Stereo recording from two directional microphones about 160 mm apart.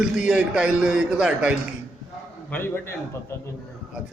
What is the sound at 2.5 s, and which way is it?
Speech, 15° left (ahead or behind).